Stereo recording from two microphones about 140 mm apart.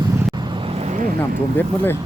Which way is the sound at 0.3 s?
35° right (ahead or behind).